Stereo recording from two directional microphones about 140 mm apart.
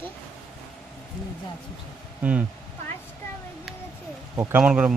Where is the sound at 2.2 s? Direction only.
10° right (ahead or behind).